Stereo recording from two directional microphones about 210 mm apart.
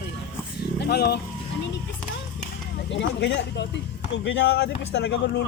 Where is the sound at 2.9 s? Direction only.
55° left (ahead or behind).